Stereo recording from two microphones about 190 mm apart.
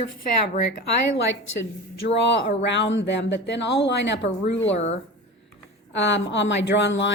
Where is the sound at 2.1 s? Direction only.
65° left (ahead or behind).